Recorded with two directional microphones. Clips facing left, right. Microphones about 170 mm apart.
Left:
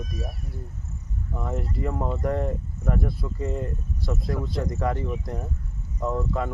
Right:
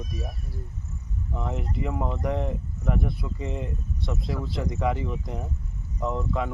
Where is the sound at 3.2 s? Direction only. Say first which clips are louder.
Left 3 dB; 10° right (ahead or behind).